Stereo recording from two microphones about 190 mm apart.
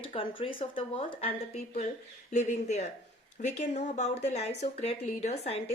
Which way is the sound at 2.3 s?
40° left (ahead or behind).